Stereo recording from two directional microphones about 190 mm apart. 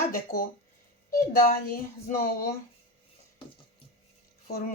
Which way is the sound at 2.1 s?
50° left (ahead or behind).